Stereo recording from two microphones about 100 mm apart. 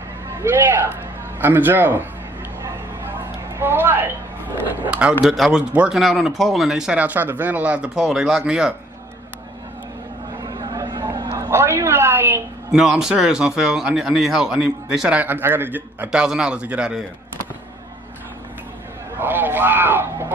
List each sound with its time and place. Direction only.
0.4 s speech: 20° right (ahead or behind)
2.6 s a sound: 25° right (ahead or behind)
4.8 s speech: 10° right (ahead or behind)
10.4 s vehicle: 40° right (ahead or behind)
11.5 s speech: 25° right (ahead or behind)
12.7 s speech: 5° right (ahead or behind)
19.1 s speech: 20° right (ahead or behind)